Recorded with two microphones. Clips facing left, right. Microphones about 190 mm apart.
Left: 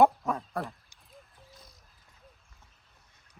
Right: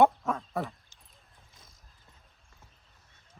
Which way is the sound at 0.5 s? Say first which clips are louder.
Right 1 dB; centre (ahead or behind).